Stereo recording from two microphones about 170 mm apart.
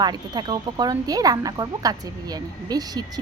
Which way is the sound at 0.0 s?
25° right (ahead or behind).